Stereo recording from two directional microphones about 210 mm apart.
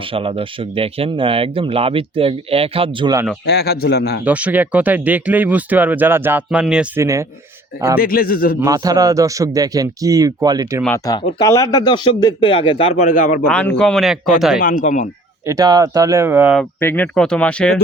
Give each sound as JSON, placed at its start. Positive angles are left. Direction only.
{"t": 0.1, "sound": "speech", "side_deg": -25}
{"t": 3.4, "sound": "a man's voice", "side_deg": 50}
{"t": 4.2, "sound": "speech", "side_deg": -5}
{"t": 7.0, "sound": "speech", "side_deg": -15}
{"t": 7.9, "sound": "a man's voice", "side_deg": 45}
{"t": 8.6, "sound": "speech", "side_deg": -15}
{"t": 10.8, "sound": "speech", "side_deg": 15}
{"t": 13.5, "sound": "speech", "side_deg": 5}
{"t": 14.6, "sound": "speech", "side_deg": 40}
{"t": 15.4, "sound": "speech", "side_deg": -15}
{"t": 16.6, "sound": "speech", "side_deg": 10}